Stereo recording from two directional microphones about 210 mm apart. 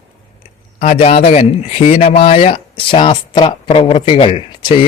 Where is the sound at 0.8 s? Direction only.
30° left (ahead or behind).